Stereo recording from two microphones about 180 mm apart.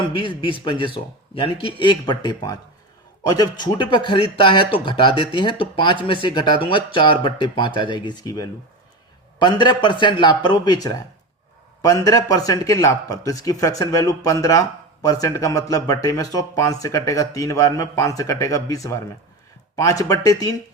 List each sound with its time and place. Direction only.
0.1 s speech: 25° left (ahead or behind)